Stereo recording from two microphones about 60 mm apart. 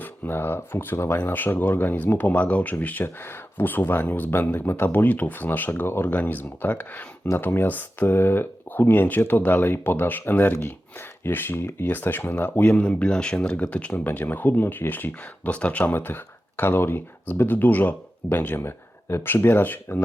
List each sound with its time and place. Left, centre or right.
0.0 s speech: left
3.0 s speech: left
7.3 s speech: left
12.8 s speech: left